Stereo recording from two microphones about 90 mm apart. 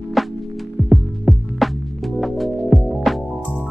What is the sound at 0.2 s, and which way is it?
Music, centre (ahead or behind).